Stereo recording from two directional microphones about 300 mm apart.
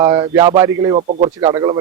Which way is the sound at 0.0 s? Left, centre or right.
Centre.